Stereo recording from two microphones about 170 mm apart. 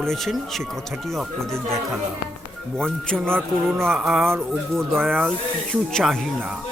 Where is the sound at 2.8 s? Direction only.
5° left (ahead or behind).